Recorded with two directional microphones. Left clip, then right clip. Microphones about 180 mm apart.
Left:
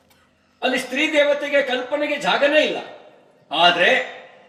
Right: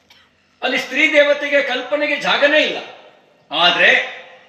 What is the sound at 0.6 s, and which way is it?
A man's voice, 15° right (ahead or behind).